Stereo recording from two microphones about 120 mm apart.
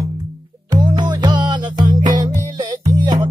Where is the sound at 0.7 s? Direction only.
35° right (ahead or behind).